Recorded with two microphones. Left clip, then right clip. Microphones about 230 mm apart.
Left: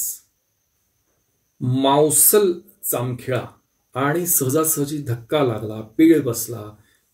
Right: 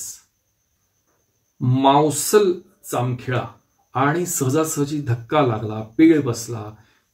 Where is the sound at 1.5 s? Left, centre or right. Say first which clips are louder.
Right 1 dB; centre.